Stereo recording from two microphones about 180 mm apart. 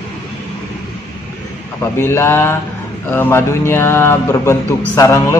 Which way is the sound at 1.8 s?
15° left (ahead or behind).